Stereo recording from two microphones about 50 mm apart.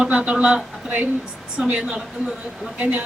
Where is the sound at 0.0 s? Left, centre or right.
Right.